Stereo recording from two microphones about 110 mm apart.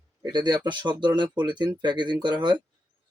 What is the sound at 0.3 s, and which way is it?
Speech, 40° right (ahead or behind).